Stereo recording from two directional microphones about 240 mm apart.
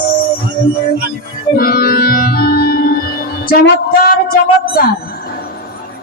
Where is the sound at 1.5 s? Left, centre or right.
Left.